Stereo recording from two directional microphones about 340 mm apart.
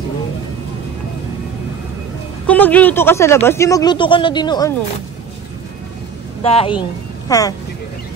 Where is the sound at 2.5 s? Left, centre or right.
Centre.